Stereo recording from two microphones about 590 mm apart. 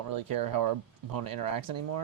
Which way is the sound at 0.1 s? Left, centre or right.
Right.